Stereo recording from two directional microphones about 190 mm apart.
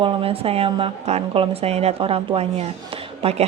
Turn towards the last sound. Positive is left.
turn(degrees=-30)  # may be behind; listen again after turning